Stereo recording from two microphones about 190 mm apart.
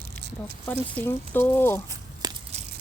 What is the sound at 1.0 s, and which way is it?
Speech, 10° left (ahead or behind).